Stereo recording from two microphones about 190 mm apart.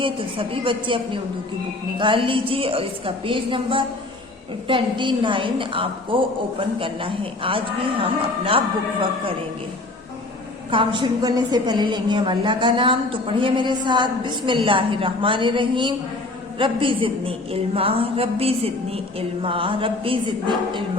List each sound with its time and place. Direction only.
0.0 s a woman's voice: 25° right (ahead or behind)
10.7 s a woman's voice: 25° right (ahead or behind)